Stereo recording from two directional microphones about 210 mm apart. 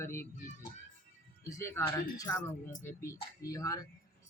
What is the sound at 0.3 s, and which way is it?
Speech, 40° left (ahead or behind).